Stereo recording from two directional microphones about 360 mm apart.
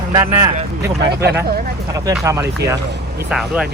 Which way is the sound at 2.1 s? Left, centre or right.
Centre.